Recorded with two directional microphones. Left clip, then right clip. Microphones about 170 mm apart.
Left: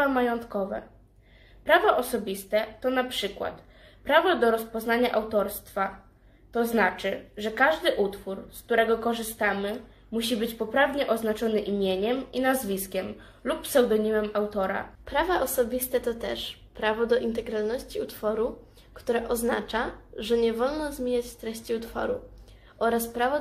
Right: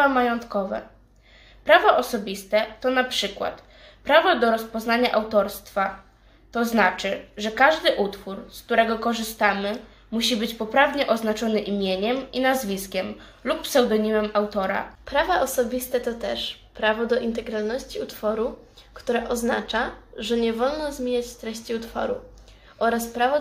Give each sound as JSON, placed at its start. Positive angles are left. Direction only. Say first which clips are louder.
{"t": 0.0, "sound": "a woman's voice", "louder": "right 5 dB", "side_deg": -5}
{"t": 15.0, "sound": "a woman's voice", "louder": "right 4 dB", "side_deg": 25}